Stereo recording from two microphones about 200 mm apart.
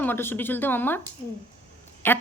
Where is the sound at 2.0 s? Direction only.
10° left (ahead or behind).